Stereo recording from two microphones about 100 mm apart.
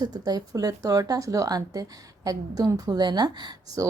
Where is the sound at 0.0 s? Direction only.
45° right (ahead or behind).